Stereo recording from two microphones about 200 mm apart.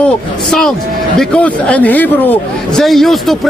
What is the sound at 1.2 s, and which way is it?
A man's voice, 5° left (ahead or behind).